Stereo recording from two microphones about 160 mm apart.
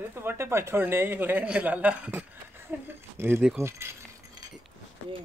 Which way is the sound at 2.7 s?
10° right (ahead or behind).